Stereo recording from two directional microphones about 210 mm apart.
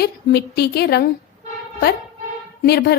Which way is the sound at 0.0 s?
50° left (ahead or behind).